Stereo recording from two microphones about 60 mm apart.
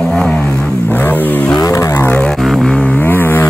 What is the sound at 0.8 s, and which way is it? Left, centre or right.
Vehicle, left.